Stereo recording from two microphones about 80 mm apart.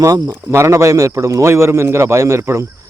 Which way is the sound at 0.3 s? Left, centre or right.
Right.